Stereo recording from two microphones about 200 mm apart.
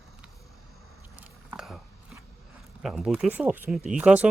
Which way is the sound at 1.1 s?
5° right (ahead or behind).